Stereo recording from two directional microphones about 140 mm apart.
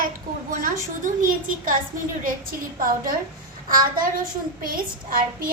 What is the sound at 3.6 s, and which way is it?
Speech, 80° right.